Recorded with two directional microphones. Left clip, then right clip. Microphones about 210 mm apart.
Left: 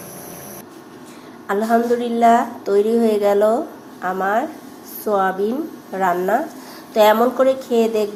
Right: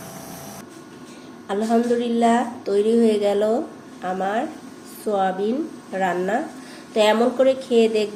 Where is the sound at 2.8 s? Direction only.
30° left (ahead or behind).